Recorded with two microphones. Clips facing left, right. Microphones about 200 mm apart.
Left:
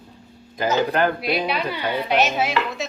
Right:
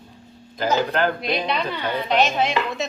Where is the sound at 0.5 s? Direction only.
10° left (ahead or behind).